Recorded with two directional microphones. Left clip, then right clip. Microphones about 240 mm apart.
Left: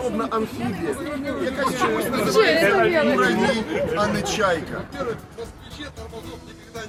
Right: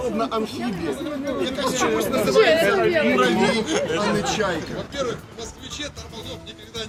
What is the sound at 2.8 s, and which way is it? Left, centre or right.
Speech, left.